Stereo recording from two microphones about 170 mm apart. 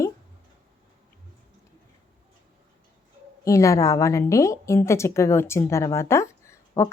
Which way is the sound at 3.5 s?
20° left (ahead or behind).